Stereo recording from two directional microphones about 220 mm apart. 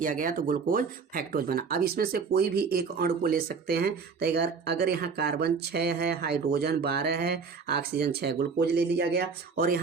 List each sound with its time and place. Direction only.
0.0 s speech: 40° right (ahead or behind)